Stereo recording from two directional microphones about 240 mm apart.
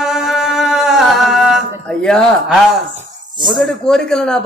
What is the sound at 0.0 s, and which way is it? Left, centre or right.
Music, centre.